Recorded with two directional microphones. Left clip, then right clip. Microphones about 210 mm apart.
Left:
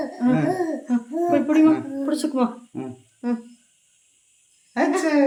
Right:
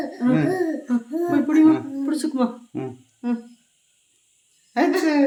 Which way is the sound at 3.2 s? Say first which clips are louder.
Even; 20° left (ahead or behind).